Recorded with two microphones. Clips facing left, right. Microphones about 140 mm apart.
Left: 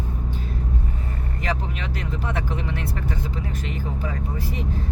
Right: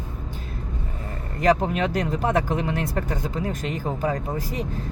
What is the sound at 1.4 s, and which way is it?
Speech, 45° right (ahead or behind).